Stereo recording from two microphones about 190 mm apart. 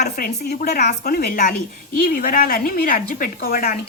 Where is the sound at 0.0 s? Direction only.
55° left (ahead or behind).